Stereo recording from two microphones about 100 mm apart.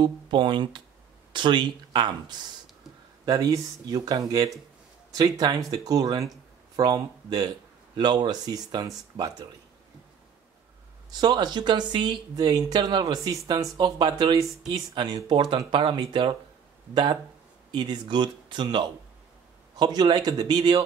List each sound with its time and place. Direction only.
0.0 s speech: 50° right (ahead or behind)
3.3 s speech: 35° right (ahead or behind)
11.1 s speech: 45° right (ahead or behind)
13.7 s speech: 50° right (ahead or behind)